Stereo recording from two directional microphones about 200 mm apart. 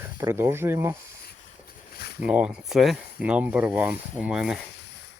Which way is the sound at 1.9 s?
50° left (ahead or behind).